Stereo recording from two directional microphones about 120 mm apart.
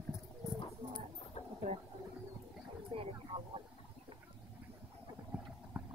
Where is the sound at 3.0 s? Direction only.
50° right (ahead or behind).